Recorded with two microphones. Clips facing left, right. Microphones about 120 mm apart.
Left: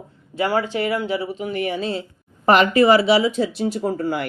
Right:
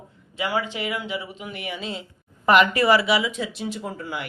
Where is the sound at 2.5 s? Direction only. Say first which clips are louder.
Left 3 dB; 30° left (ahead or behind); by 4.3 s 45° left (ahead or behind).